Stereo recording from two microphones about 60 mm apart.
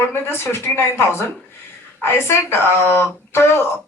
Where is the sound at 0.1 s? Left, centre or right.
Left.